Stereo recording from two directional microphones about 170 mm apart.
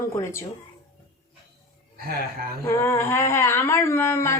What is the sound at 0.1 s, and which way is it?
Speech, 15° left (ahead or behind).